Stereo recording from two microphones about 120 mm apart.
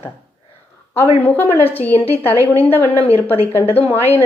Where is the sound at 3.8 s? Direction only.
55° left (ahead or behind).